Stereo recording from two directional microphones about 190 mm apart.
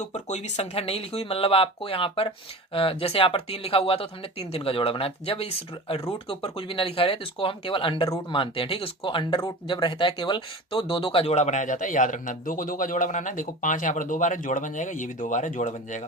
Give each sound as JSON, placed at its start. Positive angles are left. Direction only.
{"t": 0.0, "sound": "speech", "side_deg": 35}